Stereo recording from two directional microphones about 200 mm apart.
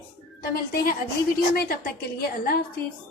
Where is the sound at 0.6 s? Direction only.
50° left (ahead or behind).